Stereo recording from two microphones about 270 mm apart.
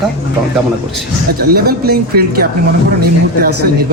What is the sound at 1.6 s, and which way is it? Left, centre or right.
Speech, right.